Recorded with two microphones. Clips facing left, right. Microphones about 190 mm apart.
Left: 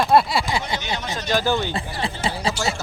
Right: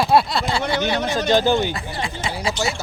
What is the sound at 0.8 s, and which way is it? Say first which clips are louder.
Speech: right 7 dB; 60° right (ahead or behind).